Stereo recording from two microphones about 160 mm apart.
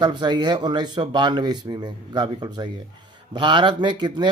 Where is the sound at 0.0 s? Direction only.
25° right (ahead or behind).